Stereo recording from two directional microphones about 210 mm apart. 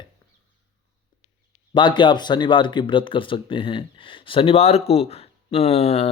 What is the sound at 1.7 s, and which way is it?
Speech, 20° left (ahead or behind).